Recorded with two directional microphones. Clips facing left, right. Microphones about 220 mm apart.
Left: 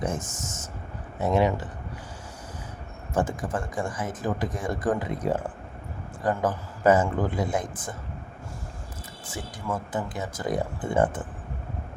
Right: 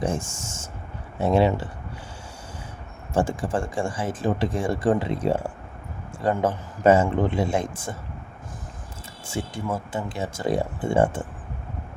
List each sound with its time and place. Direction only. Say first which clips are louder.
0.0 s speech: right 3 dB; 30° right (ahead or behind)
3.2 s speech: right 3 dB; 30° right (ahead or behind)
9.2 s speech: right 5 dB; 25° right (ahead or behind)